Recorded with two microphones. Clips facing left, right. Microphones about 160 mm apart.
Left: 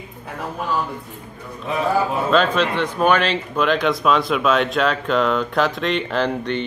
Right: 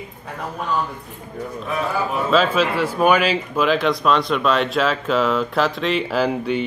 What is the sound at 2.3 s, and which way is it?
Speech, 5° right (ahead or behind).